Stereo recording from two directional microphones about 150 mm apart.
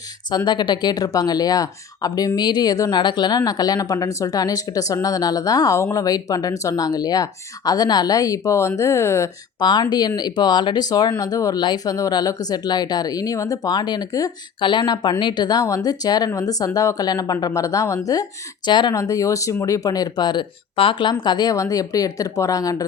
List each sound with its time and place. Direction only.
0.3 s speech: 30° left (ahead or behind)